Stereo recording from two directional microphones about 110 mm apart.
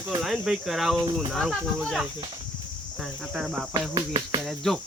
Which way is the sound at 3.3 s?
5° right (ahead or behind).